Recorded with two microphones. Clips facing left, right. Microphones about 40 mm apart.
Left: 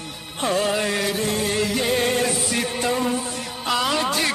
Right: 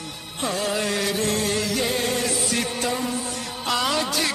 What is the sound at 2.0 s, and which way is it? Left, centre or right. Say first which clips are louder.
Music: left 3 dB; left.